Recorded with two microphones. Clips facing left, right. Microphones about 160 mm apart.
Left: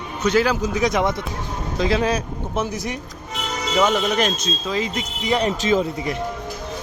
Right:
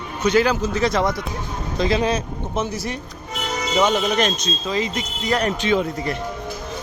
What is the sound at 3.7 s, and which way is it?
Speech, centre (ahead or behind).